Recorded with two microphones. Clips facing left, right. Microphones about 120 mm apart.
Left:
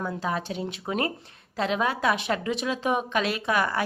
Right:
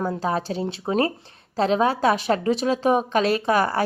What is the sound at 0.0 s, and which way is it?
A woman's voice, 35° right (ahead or behind).